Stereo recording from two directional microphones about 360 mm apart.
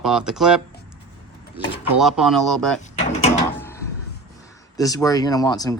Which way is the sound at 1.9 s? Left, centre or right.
Centre.